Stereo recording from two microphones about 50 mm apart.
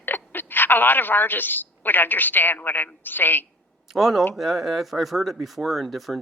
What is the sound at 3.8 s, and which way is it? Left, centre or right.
A man's voice, centre.